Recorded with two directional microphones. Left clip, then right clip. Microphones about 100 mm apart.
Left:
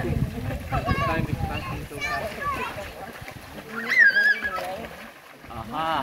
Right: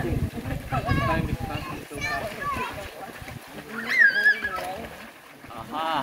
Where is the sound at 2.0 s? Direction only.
30° right (ahead or behind).